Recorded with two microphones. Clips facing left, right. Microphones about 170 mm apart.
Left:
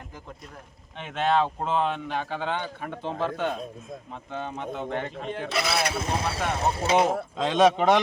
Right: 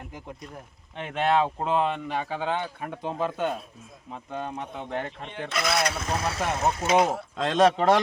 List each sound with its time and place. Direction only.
0.9 s speech: 5° right (ahead or behind)
6.0 s speech: 30° left (ahead or behind)
7.4 s speech: centre (ahead or behind)